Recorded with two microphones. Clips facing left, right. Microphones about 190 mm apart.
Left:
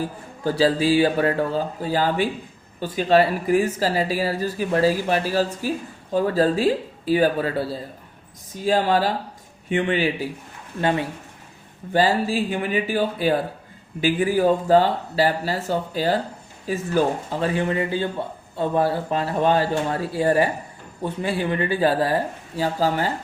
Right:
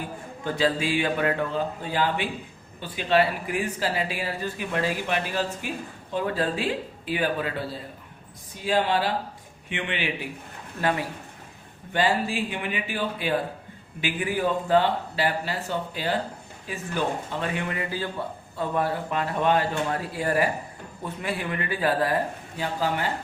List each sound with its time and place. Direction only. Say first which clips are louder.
0.0 s speech: left 6 dB; 35° left (ahead or behind)
10.8 s speech: left 4 dB; 25° left (ahead or behind)
11.9 s speech: left 5 dB; 35° left (ahead or behind)